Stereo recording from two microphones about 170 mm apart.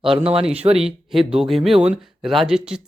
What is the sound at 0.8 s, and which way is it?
Speech, centre (ahead or behind).